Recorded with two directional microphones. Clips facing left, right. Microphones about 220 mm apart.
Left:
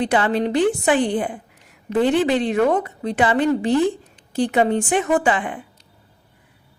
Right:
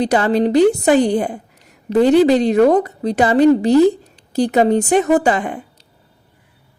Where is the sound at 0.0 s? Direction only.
40° right (ahead or behind).